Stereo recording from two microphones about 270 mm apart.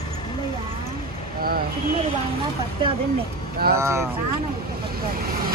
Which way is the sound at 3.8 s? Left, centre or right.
Centre.